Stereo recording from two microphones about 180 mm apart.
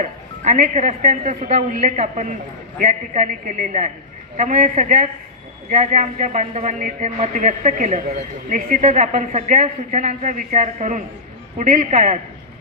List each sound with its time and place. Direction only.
0.0 s a man's voice: 45° right (ahead or behind)